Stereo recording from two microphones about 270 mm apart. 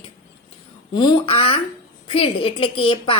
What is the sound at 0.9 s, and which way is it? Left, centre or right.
A woman's voice, centre.